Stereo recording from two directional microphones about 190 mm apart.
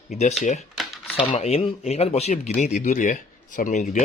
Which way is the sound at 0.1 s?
40° left (ahead or behind).